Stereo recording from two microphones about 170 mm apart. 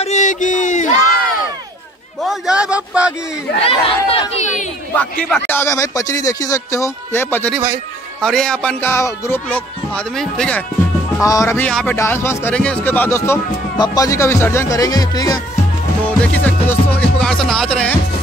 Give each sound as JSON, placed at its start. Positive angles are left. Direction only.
{"t": 0.0, "sound": "speech", "side_deg": 45}
{"t": 2.2, "sound": "speech", "side_deg": -5}
{"t": 3.6, "sound": "speech", "side_deg": 35}
{"t": 5.3, "sound": "speech", "side_deg": 15}
{"t": 7.5, "sound": "speech", "side_deg": -15}
{"t": 8.2, "sound": "speech", "side_deg": 5}
{"t": 11.2, "sound": "speech", "side_deg": 15}
{"t": 16.1, "sound": "speech", "side_deg": 10}